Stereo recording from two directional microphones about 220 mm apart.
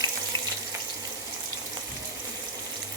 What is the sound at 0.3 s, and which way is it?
Water tap, 70° right (ahead or behind).